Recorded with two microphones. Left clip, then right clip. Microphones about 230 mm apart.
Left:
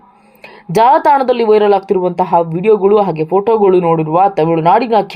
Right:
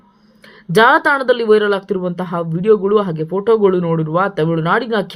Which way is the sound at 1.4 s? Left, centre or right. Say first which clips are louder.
Left 4 dB; left.